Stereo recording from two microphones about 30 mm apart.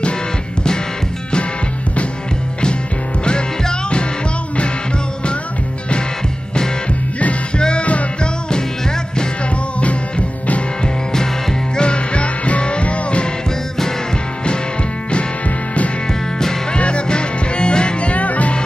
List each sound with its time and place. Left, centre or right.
7.5 s music: left
11.7 s music: left
16.7 s music: left